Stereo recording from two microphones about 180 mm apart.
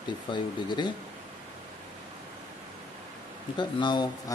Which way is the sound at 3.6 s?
25° left (ahead or behind).